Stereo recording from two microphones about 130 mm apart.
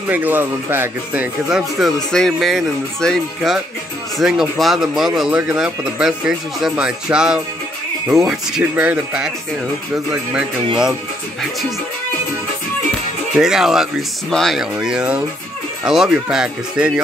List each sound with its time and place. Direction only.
0.1 s speech: 15° right (ahead or behind)
1.8 s speech: centre (ahead or behind)
13.3 s speech: 5° right (ahead or behind)